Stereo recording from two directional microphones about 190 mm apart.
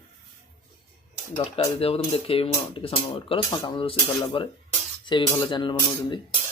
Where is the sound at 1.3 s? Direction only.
30° left (ahead or behind).